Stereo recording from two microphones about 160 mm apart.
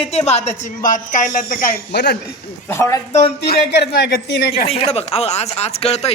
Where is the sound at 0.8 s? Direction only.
55° left (ahead or behind); by 2.1 s 75° left (ahead or behind).